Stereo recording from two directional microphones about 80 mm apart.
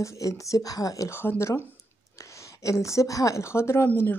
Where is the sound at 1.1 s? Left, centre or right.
Left.